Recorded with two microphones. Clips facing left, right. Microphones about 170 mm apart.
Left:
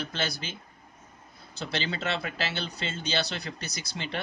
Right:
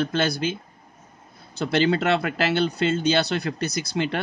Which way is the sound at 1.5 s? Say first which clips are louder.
Right 12 dB; 55° right (ahead or behind).